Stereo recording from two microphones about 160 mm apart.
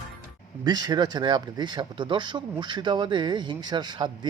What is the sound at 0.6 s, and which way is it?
Speech, 25° right (ahead or behind).